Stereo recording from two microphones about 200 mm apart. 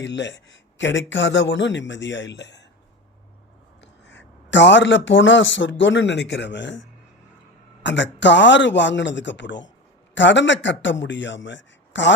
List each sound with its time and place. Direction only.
0.0 s speech: 65° left (ahead or behind)
4.0 s speech: 65° left (ahead or behind)
7.9 s speech: 65° left (ahead or behind)